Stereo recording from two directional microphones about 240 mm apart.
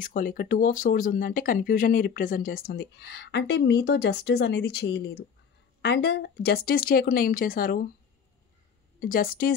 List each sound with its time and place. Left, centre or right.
0.0 s speech: left
9.0 s speech: left